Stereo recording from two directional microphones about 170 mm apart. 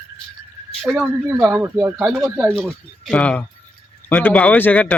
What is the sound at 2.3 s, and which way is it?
Speech, 10° right (ahead or behind).